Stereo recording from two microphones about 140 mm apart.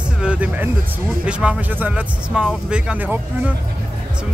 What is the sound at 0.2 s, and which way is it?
Music, 10° right (ahead or behind).